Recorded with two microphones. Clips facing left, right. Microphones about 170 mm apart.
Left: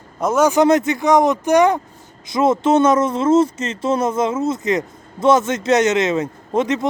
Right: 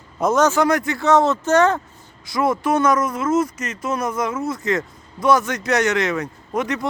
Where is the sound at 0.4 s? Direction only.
20° left (ahead or behind).